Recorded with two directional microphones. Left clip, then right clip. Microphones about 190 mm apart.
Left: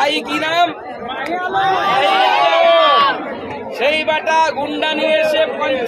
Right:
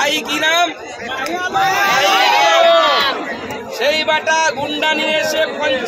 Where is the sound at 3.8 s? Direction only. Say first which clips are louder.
Even; 5° left (ahead or behind).